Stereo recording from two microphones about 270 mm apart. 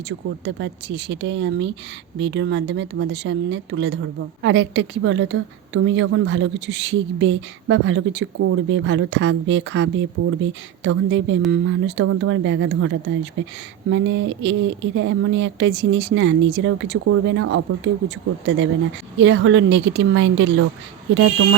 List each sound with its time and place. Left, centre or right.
0.1 s speech: right